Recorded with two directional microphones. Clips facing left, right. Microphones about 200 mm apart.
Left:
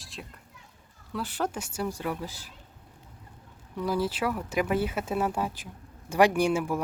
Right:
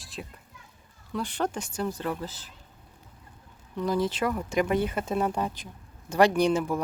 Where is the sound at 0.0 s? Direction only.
Centre (ahead or behind).